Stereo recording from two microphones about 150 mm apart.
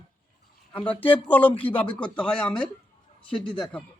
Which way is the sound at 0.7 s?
10° left (ahead or behind).